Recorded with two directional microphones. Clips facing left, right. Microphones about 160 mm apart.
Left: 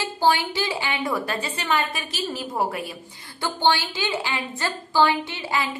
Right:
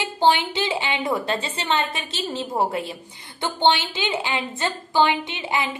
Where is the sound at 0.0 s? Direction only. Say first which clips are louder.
Right 2 dB; 20° right (ahead or behind).